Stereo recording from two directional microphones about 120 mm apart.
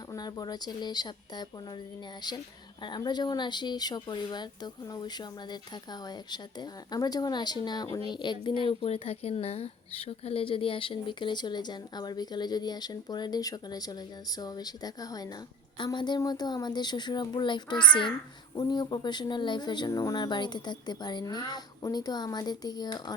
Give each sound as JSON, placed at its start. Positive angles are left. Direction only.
{"t": 0.1, "sound": "speech", "side_deg": 35}